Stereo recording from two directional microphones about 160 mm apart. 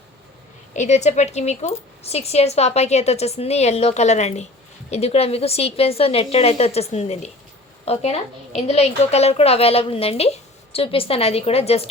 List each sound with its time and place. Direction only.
0.8 s a woman's voice: 45° left (ahead or behind)